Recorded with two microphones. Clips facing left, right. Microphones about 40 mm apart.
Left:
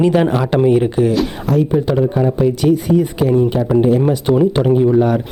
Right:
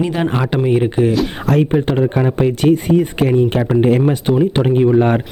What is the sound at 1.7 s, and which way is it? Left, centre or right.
Speech, right.